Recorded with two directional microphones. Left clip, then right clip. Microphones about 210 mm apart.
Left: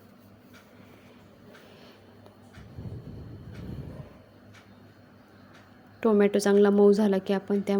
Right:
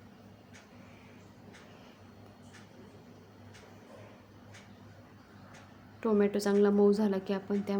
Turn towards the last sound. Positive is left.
turn(degrees=30)  # may be behind; listen again after turning